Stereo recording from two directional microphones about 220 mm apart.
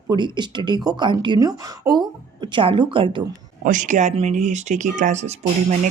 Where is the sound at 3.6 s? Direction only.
35° right (ahead or behind).